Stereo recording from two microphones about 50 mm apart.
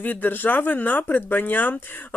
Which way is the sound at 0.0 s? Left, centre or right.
Left.